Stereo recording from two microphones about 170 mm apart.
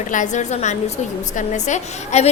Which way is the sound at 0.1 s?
45° left (ahead or behind).